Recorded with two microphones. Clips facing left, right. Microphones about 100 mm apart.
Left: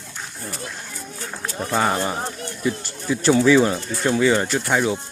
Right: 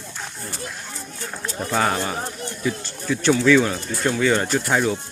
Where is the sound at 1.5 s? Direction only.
5° left (ahead or behind).